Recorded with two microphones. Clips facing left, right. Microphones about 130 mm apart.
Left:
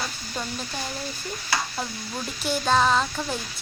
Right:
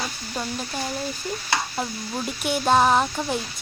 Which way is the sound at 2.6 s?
15° right (ahead or behind).